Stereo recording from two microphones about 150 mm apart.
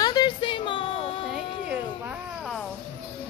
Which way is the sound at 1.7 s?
10° right (ahead or behind).